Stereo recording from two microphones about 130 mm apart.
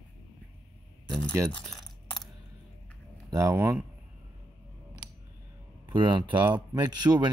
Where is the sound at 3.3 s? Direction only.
25° right (ahead or behind).